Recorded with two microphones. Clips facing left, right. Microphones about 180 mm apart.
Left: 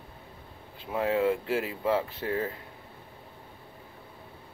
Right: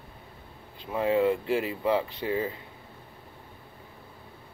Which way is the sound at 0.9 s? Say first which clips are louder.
Right 2 dB; centre (ahead or behind).